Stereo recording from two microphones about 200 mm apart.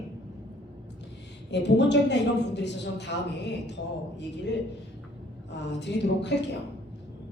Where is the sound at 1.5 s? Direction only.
60° left (ahead or behind).